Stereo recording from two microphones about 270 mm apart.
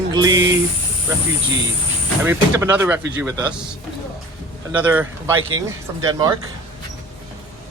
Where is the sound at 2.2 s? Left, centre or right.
Centre.